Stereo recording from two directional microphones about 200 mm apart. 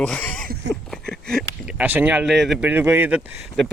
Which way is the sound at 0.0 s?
5° left (ahead or behind).